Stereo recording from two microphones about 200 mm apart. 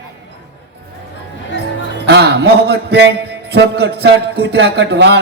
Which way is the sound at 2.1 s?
60° right (ahead or behind).